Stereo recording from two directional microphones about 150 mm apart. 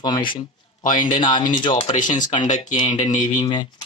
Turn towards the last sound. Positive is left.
turn(degrees=30)  # may be behind; listen again after turning